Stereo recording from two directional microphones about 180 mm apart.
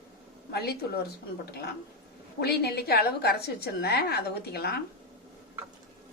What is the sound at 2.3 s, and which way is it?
A woman's voice, 60° left (ahead or behind).